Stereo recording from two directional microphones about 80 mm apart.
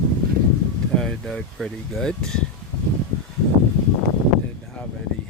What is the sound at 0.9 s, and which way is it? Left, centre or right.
Speech, centre.